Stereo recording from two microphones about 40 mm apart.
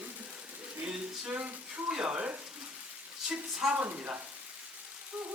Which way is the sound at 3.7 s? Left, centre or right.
Right.